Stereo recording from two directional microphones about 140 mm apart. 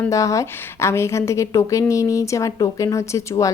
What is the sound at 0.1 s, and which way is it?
A woman's voice, 25° left (ahead or behind).